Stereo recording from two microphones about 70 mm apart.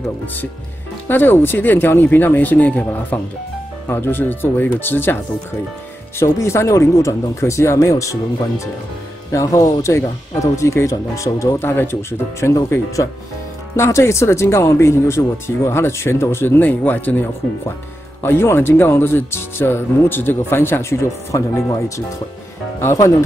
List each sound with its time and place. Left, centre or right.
1.0 s speech: left
6.1 s speech: left
11.6 s speech: left
21.3 s speech: left